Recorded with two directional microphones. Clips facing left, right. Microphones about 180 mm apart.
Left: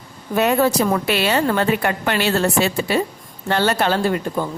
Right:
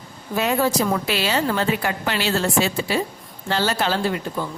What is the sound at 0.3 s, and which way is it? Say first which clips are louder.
A woman's voice: left 4 dB; 60° left (ahead or behind).